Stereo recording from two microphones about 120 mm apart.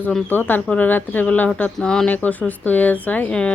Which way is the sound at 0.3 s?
15° left (ahead or behind).